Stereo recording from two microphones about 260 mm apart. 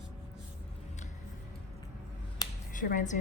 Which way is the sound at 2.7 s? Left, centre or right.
Left.